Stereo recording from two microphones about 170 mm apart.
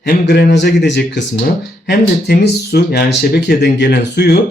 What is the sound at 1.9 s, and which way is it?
Speech, 70° left (ahead or behind).